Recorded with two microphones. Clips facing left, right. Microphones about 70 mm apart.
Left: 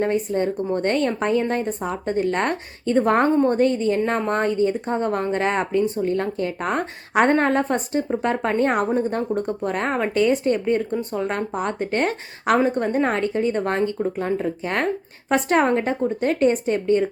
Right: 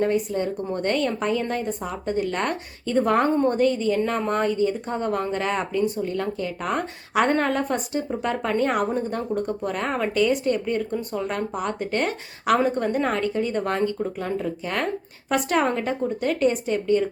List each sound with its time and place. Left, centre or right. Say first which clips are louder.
0.0 s a woman's voice: left 2 dB; left